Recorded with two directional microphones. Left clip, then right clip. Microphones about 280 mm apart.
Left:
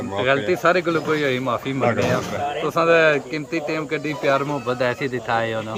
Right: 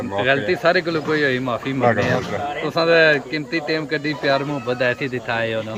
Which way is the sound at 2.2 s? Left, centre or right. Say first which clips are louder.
Even; left.